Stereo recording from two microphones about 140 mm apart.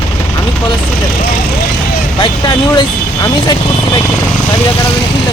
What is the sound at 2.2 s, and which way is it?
Speech, 35° left (ahead or behind).